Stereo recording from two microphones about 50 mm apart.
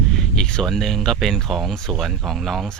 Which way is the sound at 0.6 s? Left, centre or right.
Centre.